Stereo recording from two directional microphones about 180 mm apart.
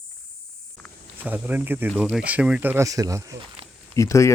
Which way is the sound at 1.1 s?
10° right (ahead or behind).